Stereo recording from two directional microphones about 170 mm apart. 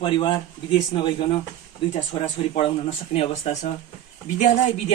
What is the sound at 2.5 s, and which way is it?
Speech, 40° left (ahead or behind).